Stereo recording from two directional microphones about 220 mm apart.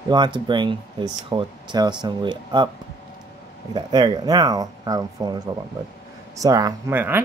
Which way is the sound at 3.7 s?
20° right (ahead or behind).